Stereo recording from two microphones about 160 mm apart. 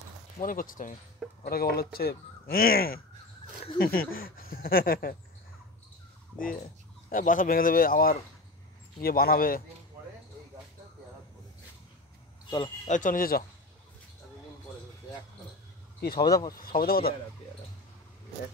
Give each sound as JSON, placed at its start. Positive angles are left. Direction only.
{"t": 0.4, "sound": "speech", "side_deg": 60}
{"t": 1.4, "sound": "speech", "side_deg": 75}
{"t": 7.1, "sound": "speech", "side_deg": 55}
{"t": 12.4, "sound": "speech", "side_deg": 30}
{"t": 12.8, "sound": "speech", "side_deg": 55}
{"t": 16.2, "sound": "speech", "side_deg": 20}
{"t": 16.5, "sound": "speech", "side_deg": 65}